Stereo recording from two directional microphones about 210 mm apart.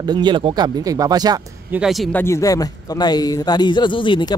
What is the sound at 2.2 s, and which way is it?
Speech, 15° left (ahead or behind).